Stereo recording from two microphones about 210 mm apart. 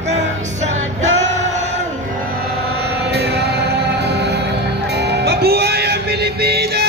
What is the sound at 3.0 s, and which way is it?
Music, 50° right (ahead or behind).